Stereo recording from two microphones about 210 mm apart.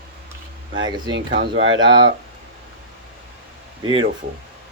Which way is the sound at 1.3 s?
50° right (ahead or behind).